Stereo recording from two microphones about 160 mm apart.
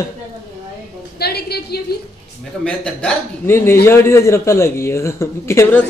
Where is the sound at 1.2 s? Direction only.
80° left.